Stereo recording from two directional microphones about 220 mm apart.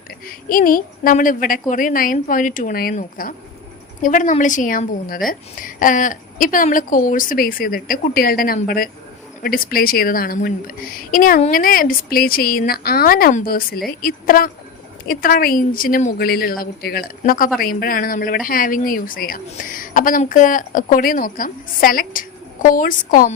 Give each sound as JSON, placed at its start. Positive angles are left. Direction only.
{"t": 0.3, "sound": "speech", "side_deg": 40}